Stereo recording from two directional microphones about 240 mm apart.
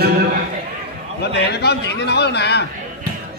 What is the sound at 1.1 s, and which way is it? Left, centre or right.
A man's voice, left.